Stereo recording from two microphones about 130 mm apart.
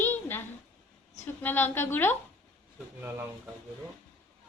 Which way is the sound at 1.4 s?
15° left (ahead or behind).